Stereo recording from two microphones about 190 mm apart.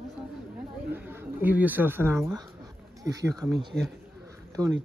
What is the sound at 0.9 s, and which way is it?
Speech, 10° right (ahead or behind).